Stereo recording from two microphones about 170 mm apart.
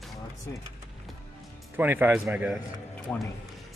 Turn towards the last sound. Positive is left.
turn(degrees=10)  # may be behind; listen again after turning